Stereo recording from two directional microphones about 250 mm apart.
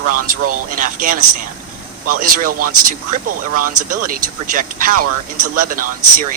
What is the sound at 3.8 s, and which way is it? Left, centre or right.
Speech, right.